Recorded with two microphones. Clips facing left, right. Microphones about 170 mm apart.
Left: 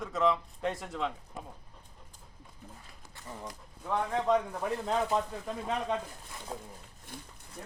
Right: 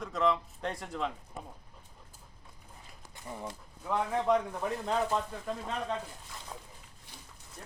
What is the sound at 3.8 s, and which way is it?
A man's voice, 5° right (ahead or behind).